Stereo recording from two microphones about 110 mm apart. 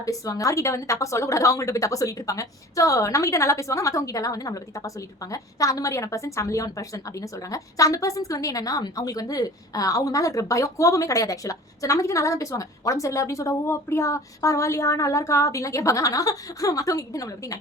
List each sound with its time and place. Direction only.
0.0 s a woman's voice: 30° left (ahead or behind)